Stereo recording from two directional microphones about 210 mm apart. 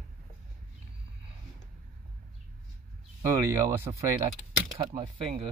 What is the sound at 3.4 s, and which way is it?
Speech, 15° right (ahead or behind).